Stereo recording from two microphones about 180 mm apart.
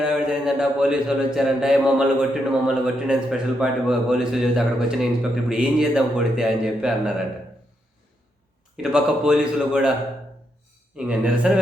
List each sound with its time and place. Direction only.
0.0 s speech: 5° right (ahead or behind)
8.7 s speech: 5° right (ahead or behind)
10.9 s speech: 5° right (ahead or behind)